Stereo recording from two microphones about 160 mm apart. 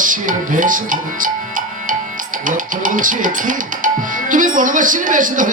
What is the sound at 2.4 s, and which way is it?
Speech, 55° right (ahead or behind).